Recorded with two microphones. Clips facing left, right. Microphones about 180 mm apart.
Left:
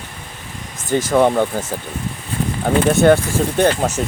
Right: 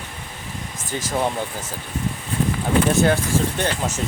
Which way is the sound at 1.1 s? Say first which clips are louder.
Left 9 dB; 65° left (ahead or behind).